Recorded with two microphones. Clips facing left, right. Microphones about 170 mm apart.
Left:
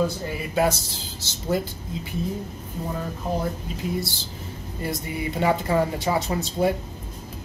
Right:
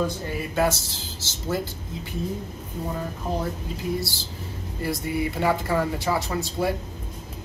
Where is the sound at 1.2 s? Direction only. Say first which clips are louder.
Left 2 dB; 15° left (ahead or behind).